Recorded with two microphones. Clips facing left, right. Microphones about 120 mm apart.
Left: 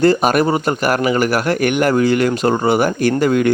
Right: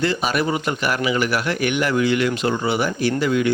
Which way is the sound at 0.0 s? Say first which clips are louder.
Left 8 dB; 45° left (ahead or behind).